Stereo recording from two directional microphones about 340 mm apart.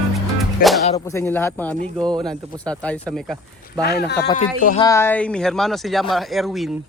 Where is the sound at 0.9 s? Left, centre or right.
Centre.